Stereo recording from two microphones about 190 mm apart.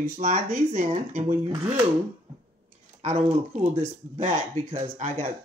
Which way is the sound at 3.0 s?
35° right (ahead or behind).